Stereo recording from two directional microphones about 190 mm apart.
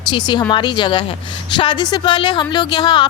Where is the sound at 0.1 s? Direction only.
25° left (ahead or behind).